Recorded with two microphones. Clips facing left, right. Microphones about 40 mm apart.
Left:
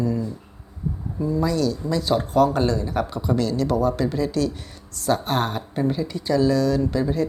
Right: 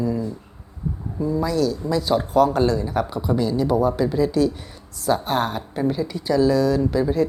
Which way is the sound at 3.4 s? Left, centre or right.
Centre.